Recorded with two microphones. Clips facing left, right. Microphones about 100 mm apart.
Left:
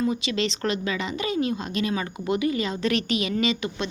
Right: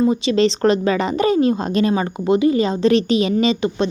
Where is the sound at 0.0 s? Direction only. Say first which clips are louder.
Right 9 dB; 30° right (ahead or behind).